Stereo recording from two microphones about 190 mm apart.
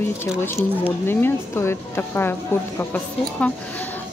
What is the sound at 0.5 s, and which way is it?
A woman's voice, 10° left (ahead or behind).